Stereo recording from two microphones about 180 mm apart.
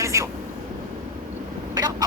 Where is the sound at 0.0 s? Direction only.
15° right (ahead or behind).